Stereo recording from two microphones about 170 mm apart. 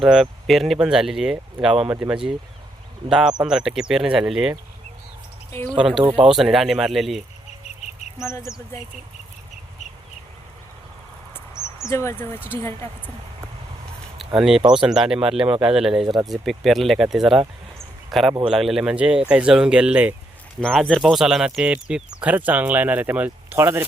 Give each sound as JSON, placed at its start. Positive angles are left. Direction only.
{"t": 0.0, "sound": "speech", "side_deg": 0}
{"t": 5.5, "sound": "speech", "side_deg": 15}
{"t": 6.0, "sound": "speech", "side_deg": -30}
{"t": 6.2, "sound": "speech", "side_deg": 0}
{"t": 8.2, "sound": "speech", "side_deg": 15}
{"t": 11.5, "sound": "speech", "side_deg": 15}
{"t": 14.3, "sound": "speech", "side_deg": 0}
{"t": 20.6, "sound": "speech", "side_deg": 5}